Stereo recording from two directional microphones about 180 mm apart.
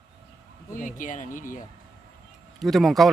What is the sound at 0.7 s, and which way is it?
Speech, 45° left (ahead or behind).